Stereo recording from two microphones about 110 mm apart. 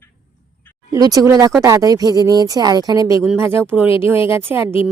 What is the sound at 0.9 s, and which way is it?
A woman's voice, 35° right (ahead or behind).